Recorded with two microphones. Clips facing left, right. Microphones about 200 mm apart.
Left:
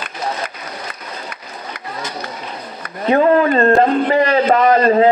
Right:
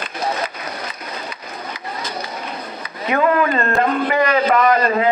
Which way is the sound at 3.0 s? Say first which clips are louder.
Left 5 dB; 30° left (ahead or behind).